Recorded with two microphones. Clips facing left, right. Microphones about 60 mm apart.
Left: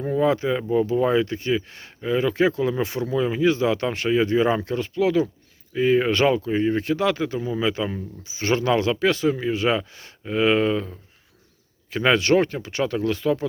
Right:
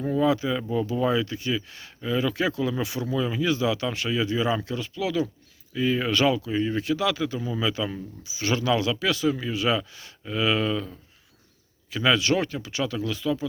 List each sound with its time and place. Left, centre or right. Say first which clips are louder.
0.0 s speech: left 2 dB; left
0.3 s speech: left 3 dB; left
7.3 s speech: left 4 dB; left
8.2 s speech: left 4 dB; left